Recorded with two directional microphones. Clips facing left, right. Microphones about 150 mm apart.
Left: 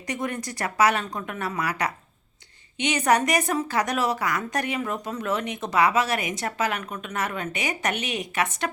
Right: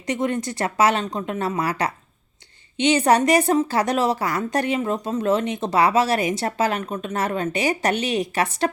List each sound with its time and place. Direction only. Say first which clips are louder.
0.1 s a woman's voice: right 6 dB; 25° right (ahead or behind)